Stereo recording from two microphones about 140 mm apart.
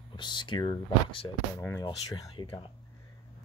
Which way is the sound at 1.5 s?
20° left (ahead or behind).